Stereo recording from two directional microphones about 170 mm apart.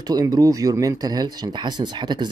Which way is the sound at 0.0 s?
25° right (ahead or behind).